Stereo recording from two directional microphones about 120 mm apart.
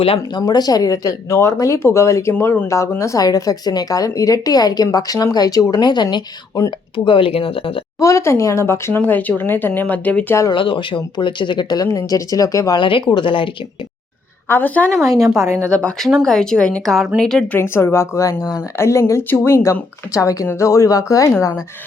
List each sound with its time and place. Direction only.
0.3 s a woman's voice: 35° left (ahead or behind); by 7.8 s 50° left (ahead or behind)
7.9 s speech: 25° left (ahead or behind)
10.5 s a woman's voice: 45° left (ahead or behind)
12.8 s speech: 45° left (ahead or behind)
14.4 s a woman's voice: 15° left (ahead or behind)
15.4 s speech: 25° right (ahead or behind)
15.7 s a woman's voice: 10° left (ahead or behind)
17.6 s speech: 20° left (ahead or behind)